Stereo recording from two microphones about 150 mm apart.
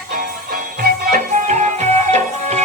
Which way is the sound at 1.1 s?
55° right (ahead or behind).